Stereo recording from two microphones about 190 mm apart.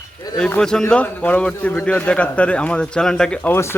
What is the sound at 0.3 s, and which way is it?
A man's voice, 5° left (ahead or behind).